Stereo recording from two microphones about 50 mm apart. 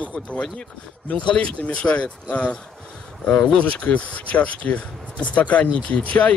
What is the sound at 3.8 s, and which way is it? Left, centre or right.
Speech, left.